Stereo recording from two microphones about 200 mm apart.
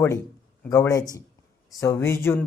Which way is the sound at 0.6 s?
15° left (ahead or behind).